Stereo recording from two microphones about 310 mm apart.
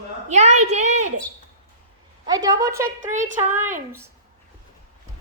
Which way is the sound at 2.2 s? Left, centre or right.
Centre.